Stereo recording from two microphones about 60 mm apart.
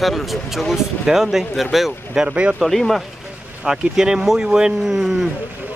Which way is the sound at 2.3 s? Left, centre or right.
Centre.